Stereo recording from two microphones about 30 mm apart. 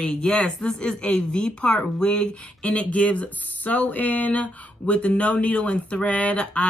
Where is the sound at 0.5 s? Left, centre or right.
Left.